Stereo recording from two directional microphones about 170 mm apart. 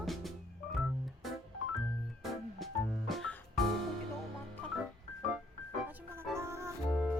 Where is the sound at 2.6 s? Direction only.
Centre (ahead or behind).